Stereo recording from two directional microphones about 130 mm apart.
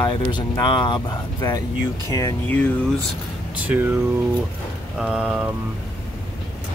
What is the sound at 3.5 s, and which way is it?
Speech, 10° right (ahead or behind).